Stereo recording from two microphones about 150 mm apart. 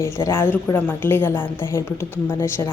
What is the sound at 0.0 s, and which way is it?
A woman's voice, 15° left (ahead or behind).